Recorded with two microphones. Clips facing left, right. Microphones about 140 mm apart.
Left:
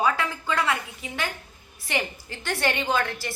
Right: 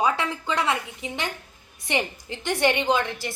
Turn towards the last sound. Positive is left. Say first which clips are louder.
# right 2 dB
turn(degrees=-20)  # may be behind; listen again after turning